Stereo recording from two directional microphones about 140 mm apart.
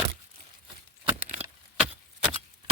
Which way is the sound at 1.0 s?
15° right (ahead or behind).